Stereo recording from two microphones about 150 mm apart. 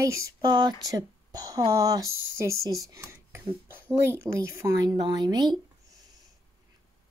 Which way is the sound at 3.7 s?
15° right (ahead or behind).